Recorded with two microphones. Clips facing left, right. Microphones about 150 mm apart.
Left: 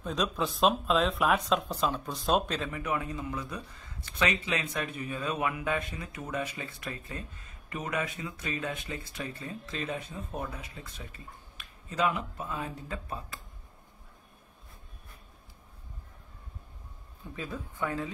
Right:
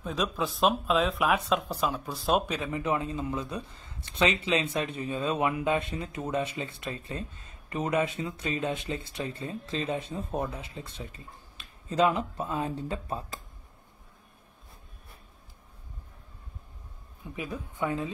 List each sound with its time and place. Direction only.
0.0 s speech: 5° right (ahead or behind)
2.7 s speech: 25° right (ahead or behind)
17.4 s speech: 20° right (ahead or behind)